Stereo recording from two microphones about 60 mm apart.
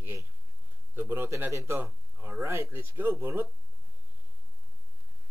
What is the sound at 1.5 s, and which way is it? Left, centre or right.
Speech, right.